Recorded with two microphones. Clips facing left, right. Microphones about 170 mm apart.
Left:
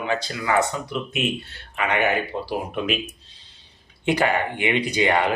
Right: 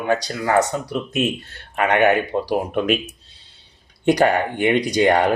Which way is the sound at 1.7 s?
55° right (ahead or behind).